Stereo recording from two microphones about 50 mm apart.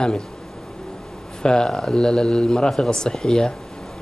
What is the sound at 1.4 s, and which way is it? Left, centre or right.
Speech, centre.